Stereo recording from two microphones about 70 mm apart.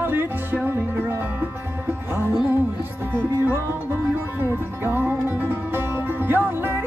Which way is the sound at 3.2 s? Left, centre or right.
Right.